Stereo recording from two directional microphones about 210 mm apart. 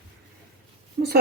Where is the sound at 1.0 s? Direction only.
45° right (ahead or behind).